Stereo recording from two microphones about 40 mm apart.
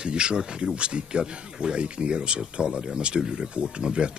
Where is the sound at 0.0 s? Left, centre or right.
Right.